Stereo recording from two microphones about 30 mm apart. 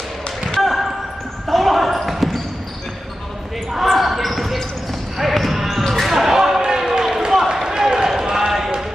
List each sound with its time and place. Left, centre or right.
0.7 s basketball bounce: centre
3.7 s basketball bounce: centre
6.3 s basketball bounce: centre
7.6 s run: right